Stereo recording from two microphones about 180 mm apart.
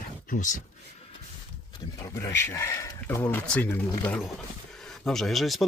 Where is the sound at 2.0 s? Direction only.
15° left (ahead or behind).